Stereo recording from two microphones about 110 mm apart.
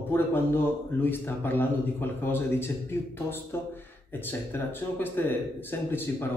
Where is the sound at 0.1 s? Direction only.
20° left (ahead or behind).